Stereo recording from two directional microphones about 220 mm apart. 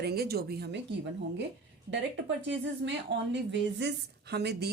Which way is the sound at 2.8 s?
55° right (ahead or behind).